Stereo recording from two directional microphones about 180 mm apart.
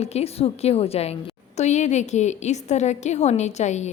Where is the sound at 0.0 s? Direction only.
35° left (ahead or behind).